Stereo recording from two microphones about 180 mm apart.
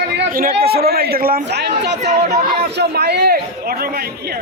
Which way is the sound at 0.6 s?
60° right (ahead or behind).